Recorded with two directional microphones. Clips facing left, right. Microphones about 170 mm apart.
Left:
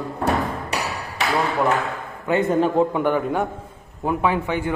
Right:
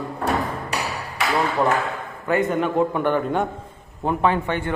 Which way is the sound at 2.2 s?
30° left (ahead or behind).